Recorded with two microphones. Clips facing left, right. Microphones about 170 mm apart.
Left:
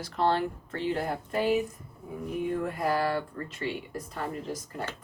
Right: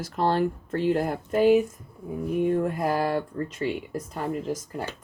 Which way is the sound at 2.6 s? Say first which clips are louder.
Right 3 dB; 45° right (ahead or behind).